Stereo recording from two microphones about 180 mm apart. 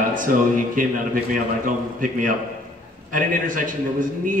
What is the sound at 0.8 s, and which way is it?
Speech, 50° right (ahead or behind).